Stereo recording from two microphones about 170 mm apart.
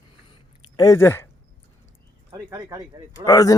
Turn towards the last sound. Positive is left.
turn(degrees=20)  # may be behind; listen again after turning